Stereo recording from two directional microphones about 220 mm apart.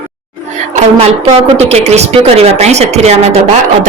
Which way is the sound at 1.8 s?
30° right (ahead or behind).